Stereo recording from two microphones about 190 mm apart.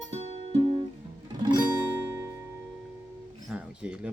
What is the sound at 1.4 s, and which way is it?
Music, 20° right (ahead or behind).